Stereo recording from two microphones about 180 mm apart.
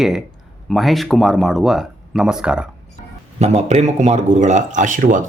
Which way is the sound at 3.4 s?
35° right (ahead or behind).